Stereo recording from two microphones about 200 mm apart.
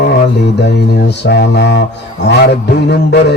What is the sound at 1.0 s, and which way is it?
A man's voice, 55° left (ahead or behind).